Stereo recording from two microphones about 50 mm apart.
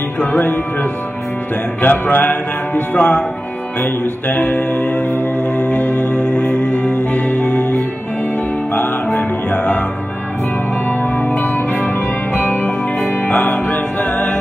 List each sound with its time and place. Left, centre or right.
0.2 s speech: left
1.8 s speech: left
3.0 s speech: left
3.8 s music: left
6.1 s music: left
10.9 s music: left